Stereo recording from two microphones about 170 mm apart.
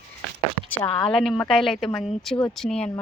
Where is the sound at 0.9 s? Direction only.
5° left (ahead or behind).